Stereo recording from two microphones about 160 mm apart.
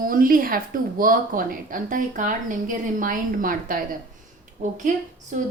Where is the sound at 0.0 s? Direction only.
60° right (ahead or behind).